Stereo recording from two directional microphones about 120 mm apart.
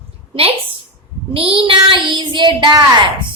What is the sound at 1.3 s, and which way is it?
Child singing, 50° right (ahead or behind).